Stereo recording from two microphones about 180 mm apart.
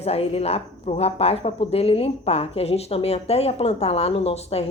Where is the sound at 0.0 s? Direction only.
35° left (ahead or behind).